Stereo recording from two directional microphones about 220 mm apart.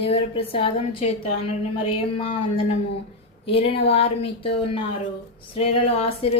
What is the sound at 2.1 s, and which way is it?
Mantra, 25° left (ahead or behind).